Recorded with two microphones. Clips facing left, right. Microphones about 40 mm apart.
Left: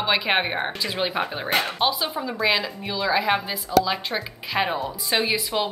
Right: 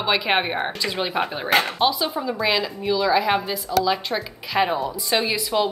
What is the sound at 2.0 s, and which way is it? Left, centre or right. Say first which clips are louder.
A woman's voice: right 2 dB; centre.